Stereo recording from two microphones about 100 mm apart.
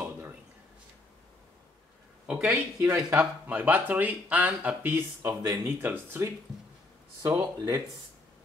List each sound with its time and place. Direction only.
2.2 s speech: 10° right (ahead or behind)
5.4 s speech: 35° right (ahead or behind)
5.8 s speech: 20° right (ahead or behind)
7.2 s speech: 35° right (ahead or behind)